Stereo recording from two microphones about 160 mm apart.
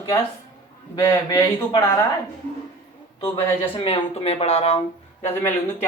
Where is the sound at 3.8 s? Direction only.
40° left (ahead or behind).